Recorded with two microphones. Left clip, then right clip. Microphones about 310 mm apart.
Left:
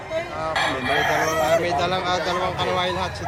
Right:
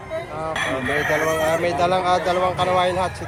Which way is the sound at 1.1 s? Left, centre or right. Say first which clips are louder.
Right 1 dB; centre.